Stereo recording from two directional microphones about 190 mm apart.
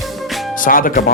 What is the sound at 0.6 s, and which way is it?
Speech, 45° left (ahead or behind).